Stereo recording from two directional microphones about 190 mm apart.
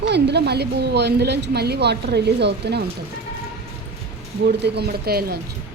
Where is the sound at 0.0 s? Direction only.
60° right (ahead or behind).